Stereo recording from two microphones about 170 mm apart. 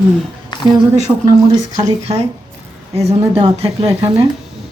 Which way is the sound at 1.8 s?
40° right (ahead or behind).